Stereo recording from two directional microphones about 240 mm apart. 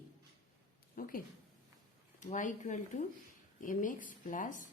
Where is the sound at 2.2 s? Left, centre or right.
Left.